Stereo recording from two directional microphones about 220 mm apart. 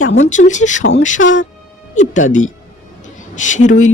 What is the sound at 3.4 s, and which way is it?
Speech, 35° left (ahead or behind).